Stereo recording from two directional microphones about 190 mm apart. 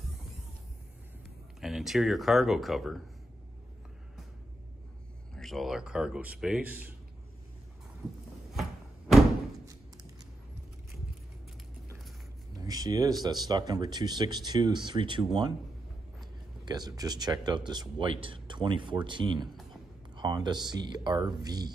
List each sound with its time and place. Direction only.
1.6 s speech: centre (ahead or behind)
5.3 s speech: centre (ahead or behind)
12.5 s a sound: 20° right (ahead or behind)
13.2 s speech: 20° right (ahead or behind)
16.6 s speech: 20° right (ahead or behind)